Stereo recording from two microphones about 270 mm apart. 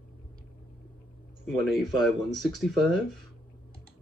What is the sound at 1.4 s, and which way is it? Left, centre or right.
Speech, centre.